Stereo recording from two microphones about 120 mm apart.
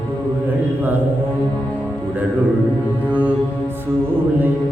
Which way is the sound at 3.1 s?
10° right (ahead or behind).